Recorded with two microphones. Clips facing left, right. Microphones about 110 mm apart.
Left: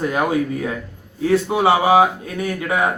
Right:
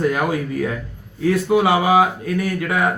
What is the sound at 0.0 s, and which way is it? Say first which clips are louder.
A man's voice: even; 20° left (ahead or behind).